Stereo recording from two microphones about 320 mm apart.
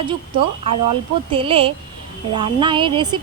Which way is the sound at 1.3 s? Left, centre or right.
Centre.